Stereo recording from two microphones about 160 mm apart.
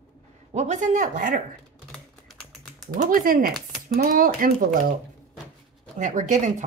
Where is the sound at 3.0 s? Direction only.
60° right (ahead or behind).